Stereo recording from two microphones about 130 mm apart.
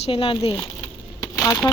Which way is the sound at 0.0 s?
45° left (ahead or behind).